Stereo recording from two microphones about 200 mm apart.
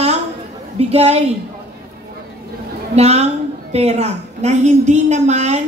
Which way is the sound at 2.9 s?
30° right (ahead or behind).